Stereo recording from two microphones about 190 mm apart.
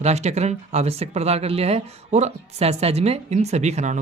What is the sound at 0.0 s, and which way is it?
Speech, 35° right (ahead or behind).